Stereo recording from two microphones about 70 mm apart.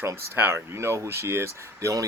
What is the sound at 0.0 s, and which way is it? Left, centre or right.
Speech, right.